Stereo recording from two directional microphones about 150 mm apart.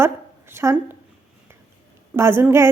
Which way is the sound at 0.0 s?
15° right (ahead or behind).